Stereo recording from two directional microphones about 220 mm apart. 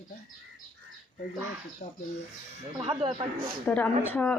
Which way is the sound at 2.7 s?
25° right (ahead or behind).